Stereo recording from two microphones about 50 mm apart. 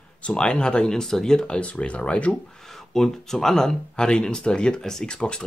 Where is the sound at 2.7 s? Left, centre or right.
Centre.